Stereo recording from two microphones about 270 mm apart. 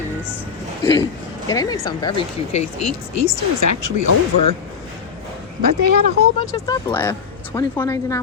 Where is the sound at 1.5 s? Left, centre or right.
Centre.